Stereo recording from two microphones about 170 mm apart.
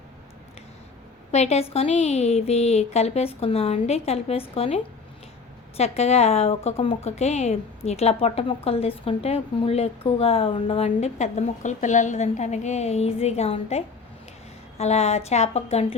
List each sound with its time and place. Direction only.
1.3 s a woman's voice: 40° left (ahead or behind)
10.8 s a woman's voice: 40° left (ahead or behind)